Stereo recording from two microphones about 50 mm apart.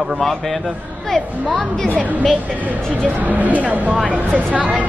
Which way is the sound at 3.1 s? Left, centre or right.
Right.